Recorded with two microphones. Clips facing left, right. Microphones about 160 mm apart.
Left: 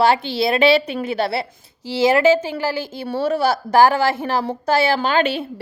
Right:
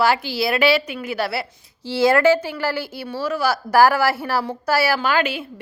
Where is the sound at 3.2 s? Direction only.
30° left (ahead or behind).